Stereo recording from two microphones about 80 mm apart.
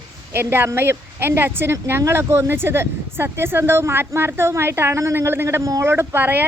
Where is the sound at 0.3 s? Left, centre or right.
Right.